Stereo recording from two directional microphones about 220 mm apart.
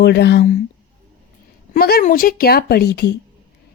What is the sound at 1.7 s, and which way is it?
A woman's voice, 45° left (ahead or behind).